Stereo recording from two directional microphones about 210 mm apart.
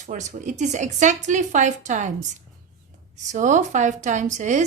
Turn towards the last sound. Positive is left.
turn(degrees=-35)  # may be behind; listen again after turning